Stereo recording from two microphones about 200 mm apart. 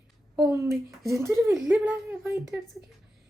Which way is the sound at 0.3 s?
15° right (ahead or behind).